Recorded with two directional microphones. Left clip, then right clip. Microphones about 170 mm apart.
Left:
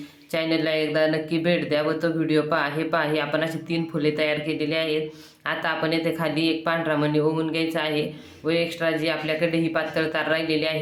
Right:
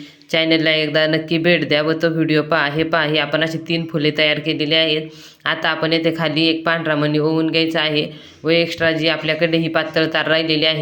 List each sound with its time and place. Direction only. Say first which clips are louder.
0.3 s speech: right 8 dB; 30° right (ahead or behind)